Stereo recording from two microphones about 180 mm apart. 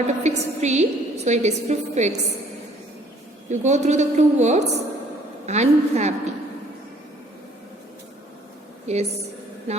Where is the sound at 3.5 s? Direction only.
40° right (ahead or behind).